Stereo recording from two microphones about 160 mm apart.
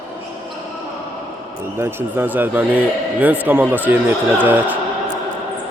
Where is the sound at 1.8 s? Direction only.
15° right (ahead or behind).